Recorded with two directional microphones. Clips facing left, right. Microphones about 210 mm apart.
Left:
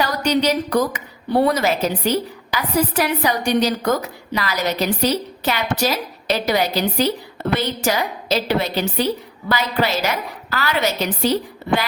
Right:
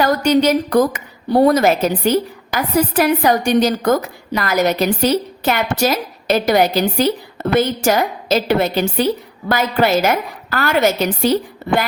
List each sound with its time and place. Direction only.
0.0 s a woman's voice: 50° right (ahead or behind)